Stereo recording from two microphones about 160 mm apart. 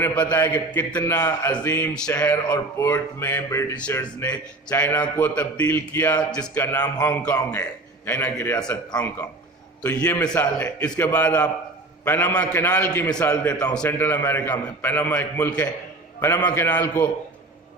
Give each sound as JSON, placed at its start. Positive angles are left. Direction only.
{"t": 0.0, "sound": "a man's voice", "side_deg": 10}
{"t": 9.8, "sound": "speech", "side_deg": 10}
{"t": 11.3, "sound": "a man's voice", "side_deg": 25}
{"t": 12.0, "sound": "speech", "side_deg": 10}